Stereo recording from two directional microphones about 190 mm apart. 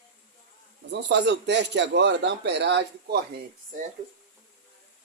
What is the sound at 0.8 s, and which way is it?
A man's voice, 65° right (ahead or behind).